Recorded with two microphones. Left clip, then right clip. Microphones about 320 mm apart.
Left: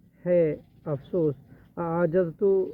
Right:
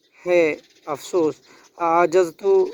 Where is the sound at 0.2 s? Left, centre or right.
Centre.